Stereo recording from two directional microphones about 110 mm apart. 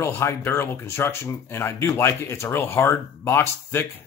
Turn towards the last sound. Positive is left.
turn(degrees=20)  # may be behind; listen again after turning